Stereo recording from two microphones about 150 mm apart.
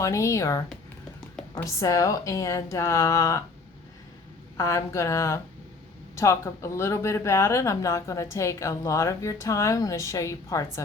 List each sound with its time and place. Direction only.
0.0 s speech: 20° left (ahead or behind)
1.6 s speech: 20° left (ahead or behind)
4.5 s speech: 20° left (ahead or behind)